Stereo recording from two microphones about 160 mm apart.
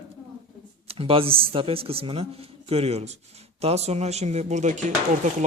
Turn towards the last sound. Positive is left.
turn(degrees=-50)  # may be behind; listen again after turning